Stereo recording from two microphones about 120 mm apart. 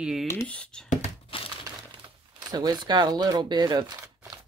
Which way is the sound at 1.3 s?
50° left (ahead or behind).